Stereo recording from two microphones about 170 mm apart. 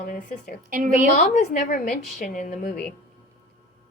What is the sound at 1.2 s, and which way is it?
A woman's voice, 50° left (ahead or behind).